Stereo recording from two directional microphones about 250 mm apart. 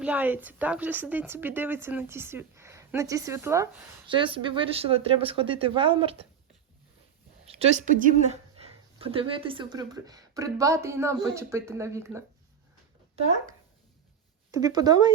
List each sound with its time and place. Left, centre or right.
0.0 s a woman's voice: centre
7.6 s a woman's voice: right; by 12.2 s centre
14.5 s a woman's voice: centre